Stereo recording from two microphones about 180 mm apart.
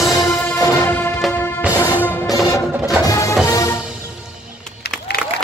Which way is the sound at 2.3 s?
20° left (ahead or behind).